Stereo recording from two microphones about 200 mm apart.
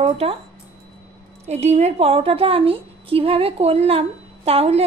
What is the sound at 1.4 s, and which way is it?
A woman's voice, 30° right (ahead or behind).